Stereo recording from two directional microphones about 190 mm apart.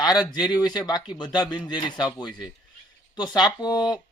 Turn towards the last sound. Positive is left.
turn(degrees=20)  # may be behind; listen again after turning